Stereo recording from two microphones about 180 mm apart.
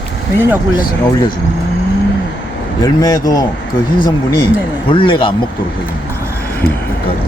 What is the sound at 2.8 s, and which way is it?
Speech, 20° left (ahead or behind).